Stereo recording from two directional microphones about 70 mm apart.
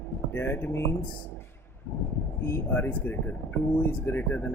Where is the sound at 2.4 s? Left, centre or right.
Left.